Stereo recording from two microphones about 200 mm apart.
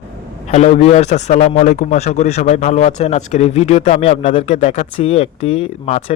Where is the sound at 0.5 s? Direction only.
35° left (ahead or behind).